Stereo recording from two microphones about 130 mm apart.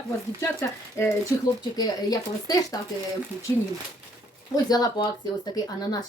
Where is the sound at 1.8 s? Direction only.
30° left (ahead or behind).